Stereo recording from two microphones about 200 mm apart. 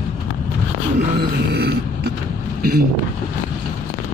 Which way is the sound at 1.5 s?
55° right (ahead or behind).